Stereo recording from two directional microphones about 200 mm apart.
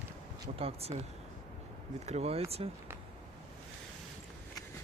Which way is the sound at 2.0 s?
30° right (ahead or behind).